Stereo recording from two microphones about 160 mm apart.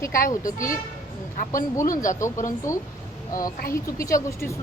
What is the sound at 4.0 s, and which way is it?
Speech, 20° left (ahead or behind).